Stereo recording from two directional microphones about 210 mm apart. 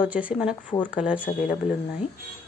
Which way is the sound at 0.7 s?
20° left (ahead or behind).